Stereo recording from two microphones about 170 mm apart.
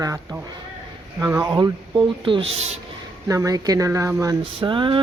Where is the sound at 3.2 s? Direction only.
20° right (ahead or behind).